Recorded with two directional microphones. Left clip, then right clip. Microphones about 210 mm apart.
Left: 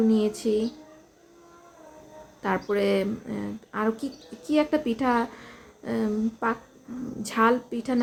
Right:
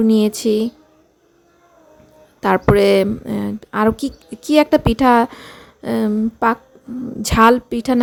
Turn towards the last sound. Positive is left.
turn(degrees=-45)  # may be behind; listen again after turning